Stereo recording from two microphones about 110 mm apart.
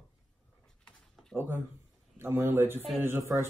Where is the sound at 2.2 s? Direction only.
20° right (ahead or behind).